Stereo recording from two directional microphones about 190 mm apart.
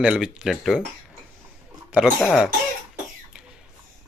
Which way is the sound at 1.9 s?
Centre (ahead or behind).